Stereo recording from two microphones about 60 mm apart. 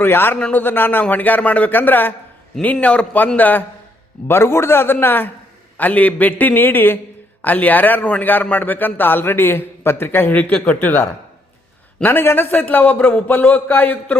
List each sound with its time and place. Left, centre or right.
0.0 s a man's voice: left
2.8 s a man's voice: left
4.3 s a man's voice: left
12.0 s a man's voice: left
12.6 s a man's voice: left